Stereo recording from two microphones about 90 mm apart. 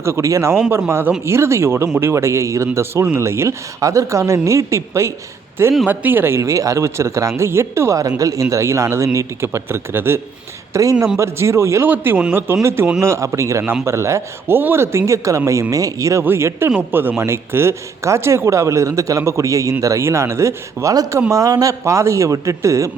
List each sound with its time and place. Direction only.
0.0 s a man's voice: 30° right (ahead or behind)
5.8 s a man's voice: 20° right (ahead or behind)
11.2 s speech: 30° right (ahead or behind)
11.9 s a man's voice: 20° right (ahead or behind)
20.9 s speech: 45° right (ahead or behind)